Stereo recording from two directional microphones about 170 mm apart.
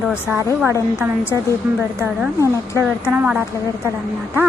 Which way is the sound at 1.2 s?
15° left (ahead or behind).